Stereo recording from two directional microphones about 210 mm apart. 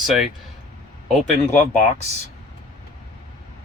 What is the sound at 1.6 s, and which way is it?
Speech, 35° left (ahead or behind).